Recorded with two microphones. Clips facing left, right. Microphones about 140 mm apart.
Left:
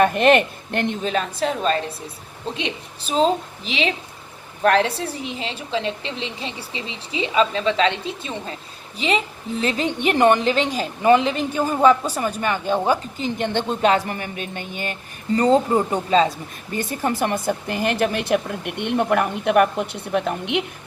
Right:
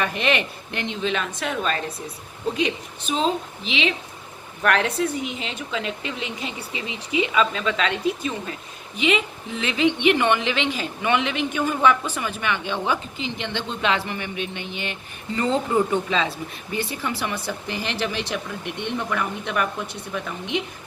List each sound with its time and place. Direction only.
0.0 s a woman's voice: 50° left (ahead or behind)